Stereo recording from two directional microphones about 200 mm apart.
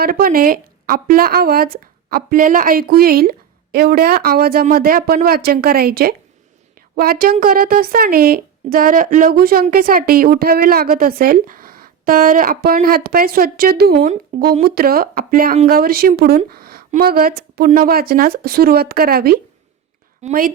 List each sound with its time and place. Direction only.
0.0 s speech: 45° right (ahead or behind)